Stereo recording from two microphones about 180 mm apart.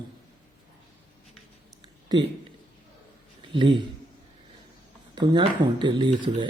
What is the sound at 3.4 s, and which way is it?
Speech, 30° right (ahead or behind).